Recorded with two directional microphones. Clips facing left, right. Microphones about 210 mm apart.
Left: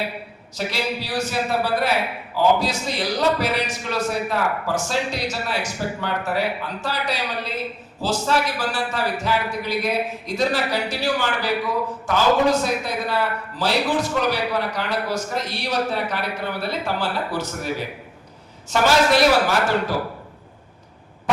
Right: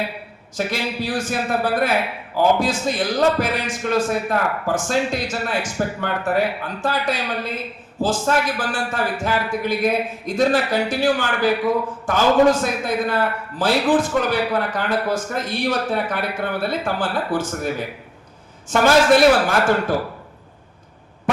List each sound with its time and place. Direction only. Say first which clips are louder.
0.5 s a man's voice: right 2 dB; 50° right (ahead or behind)